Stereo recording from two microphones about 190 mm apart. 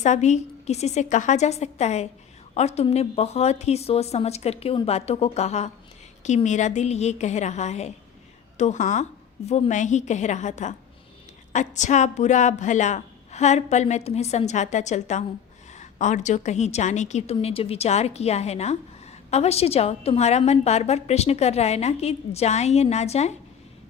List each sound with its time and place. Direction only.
0.0 s a woman's voice: 40° left (ahead or behind)